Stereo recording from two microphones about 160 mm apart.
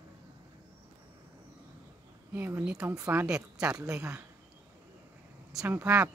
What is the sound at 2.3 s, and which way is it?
A woman's voice, 15° right (ahead or behind).